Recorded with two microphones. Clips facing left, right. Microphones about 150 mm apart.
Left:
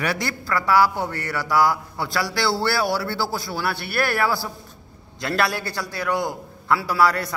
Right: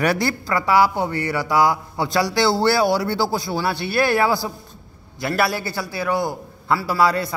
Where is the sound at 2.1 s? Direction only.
20° right (ahead or behind).